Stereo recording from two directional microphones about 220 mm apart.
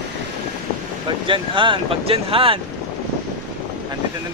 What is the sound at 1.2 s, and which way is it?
Speech, 25° right (ahead or behind).